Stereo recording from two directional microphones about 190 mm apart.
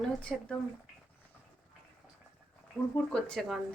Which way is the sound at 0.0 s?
5° left (ahead or behind).